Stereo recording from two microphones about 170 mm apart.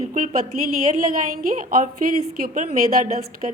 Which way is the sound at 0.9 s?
55° right (ahead or behind).